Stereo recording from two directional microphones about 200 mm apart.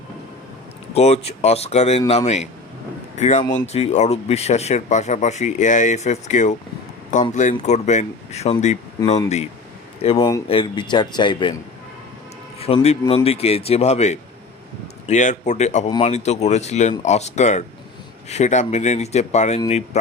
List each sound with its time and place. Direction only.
0.9 s speech: 30° left (ahead or behind)
10.0 s speech: 30° left (ahead or behind)
12.5 s speech: 30° left (ahead or behind)